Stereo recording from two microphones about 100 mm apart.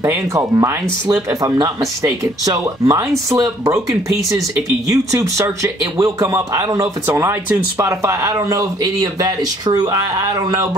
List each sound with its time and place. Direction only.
0.0 s speech: 30° right (ahead or behind)
4.8 s speech: 35° right (ahead or behind)